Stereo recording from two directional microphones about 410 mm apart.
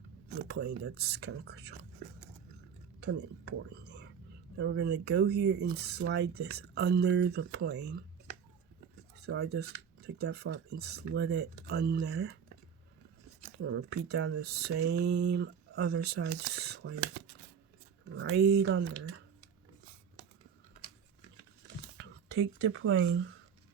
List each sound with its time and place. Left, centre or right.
0.4 s speech: right
3.1 s speech: right
9.2 s speech: right
13.6 s speech: right
18.1 s speech: right
22.7 s speech: right